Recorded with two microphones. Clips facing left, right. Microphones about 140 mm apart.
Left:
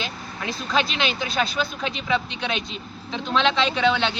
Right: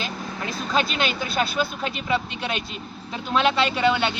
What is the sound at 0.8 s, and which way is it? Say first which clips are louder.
Speech: even; 45° right (ahead or behind).